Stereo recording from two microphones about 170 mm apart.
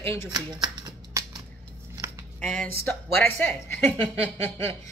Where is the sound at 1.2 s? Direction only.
15° right (ahead or behind).